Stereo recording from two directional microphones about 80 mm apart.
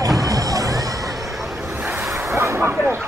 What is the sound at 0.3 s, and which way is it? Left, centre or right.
Music, right.